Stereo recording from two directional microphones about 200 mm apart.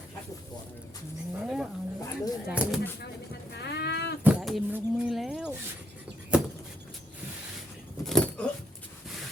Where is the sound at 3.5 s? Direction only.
55° left (ahead or behind).